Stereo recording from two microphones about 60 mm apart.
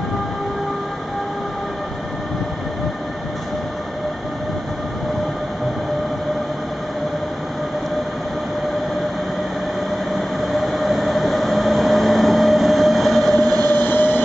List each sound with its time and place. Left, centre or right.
10.6 s train: centre
13.6 s train: left